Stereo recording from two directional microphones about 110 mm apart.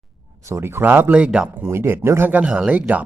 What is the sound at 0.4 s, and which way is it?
Speech, 25° right (ahead or behind).